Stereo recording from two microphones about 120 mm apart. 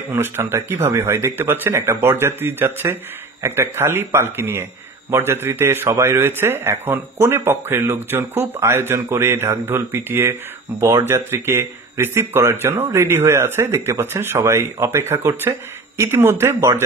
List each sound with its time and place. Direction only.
0.1 s a man's voice: 20° right (ahead or behind)